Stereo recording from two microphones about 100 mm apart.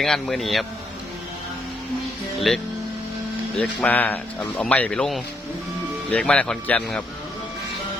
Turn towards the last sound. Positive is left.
turn(degrees=15)  # may be behind; listen again after turning